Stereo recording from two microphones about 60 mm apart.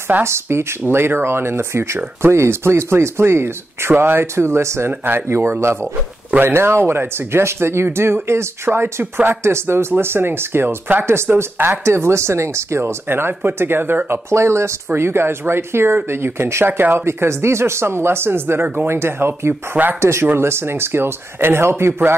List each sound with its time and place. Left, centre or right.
0.2 s speech: right
11.8 s speech: right
14.3 s speech: right
20.0 s speech: right